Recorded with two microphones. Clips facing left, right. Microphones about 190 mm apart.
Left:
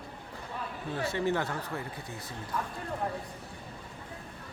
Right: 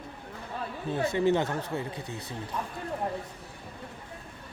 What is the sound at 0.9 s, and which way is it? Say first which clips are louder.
Speech: right 5 dB; 20° right (ahead or behind).